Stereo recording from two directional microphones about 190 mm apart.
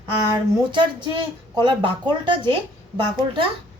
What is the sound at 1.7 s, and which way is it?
Speech, 25° right (ahead or behind).